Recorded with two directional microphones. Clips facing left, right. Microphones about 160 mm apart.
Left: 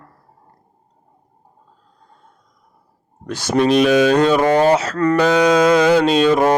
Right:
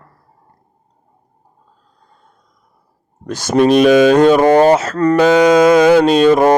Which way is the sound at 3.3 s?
45° right (ahead or behind).